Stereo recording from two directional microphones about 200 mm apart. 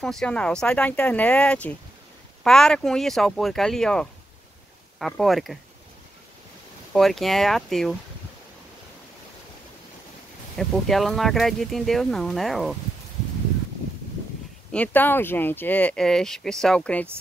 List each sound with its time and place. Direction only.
0.0 s speech: 5° left (ahead or behind)
6.9 s speech: centre (ahead or behind)
10.6 s speech: centre (ahead or behind)
14.7 s speech: 5° left (ahead or behind)